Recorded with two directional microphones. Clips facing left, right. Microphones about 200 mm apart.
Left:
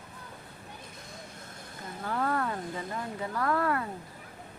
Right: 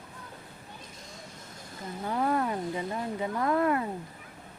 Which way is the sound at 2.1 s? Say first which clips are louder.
Right 2 dB; 20° right (ahead or behind).